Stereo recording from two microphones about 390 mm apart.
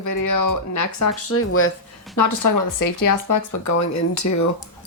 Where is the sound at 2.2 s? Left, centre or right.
Left.